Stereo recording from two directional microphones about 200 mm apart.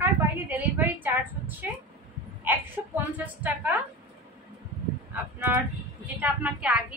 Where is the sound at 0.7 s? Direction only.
10° right (ahead or behind).